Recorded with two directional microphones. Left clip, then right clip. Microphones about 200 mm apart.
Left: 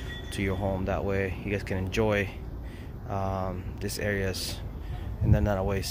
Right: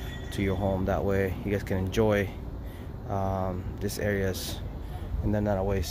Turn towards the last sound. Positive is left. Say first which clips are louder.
# right 1 dB
turn(degrees=0)  # may be behind; listen again after turning